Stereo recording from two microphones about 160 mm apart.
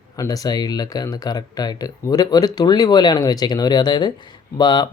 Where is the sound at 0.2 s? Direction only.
25° left (ahead or behind).